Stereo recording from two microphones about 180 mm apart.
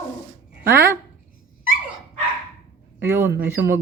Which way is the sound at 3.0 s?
10° right (ahead or behind).